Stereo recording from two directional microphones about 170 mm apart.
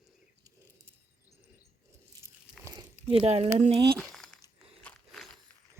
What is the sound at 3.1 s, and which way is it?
Speech, 35° right (ahead or behind).